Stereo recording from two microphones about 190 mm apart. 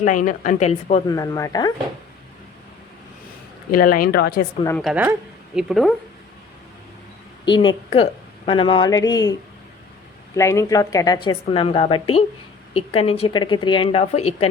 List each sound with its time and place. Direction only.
0.0 s a woman's voice: 40° left (ahead or behind)
1.0 s a woman's voice: 20° left (ahead or behind)
3.7 s speech: 50° left (ahead or behind)
4.8 s speech: 5° right (ahead or behind)
7.4 s a woman's voice: 25° left (ahead or behind)
10.3 s a woman's voice: 15° left (ahead or behind); by 14.5 s 35° left (ahead or behind)